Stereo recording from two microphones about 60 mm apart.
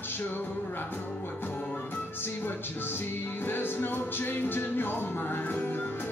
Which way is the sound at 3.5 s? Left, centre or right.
Left.